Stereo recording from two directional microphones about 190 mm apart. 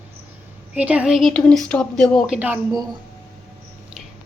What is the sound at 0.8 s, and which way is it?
Speech, 5° right (ahead or behind).